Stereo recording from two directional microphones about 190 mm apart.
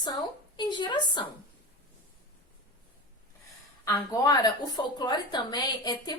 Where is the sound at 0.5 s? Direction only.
25° left (ahead or behind).